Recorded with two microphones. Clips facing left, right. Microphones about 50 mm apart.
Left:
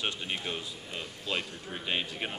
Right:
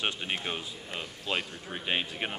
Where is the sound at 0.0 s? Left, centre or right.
Right.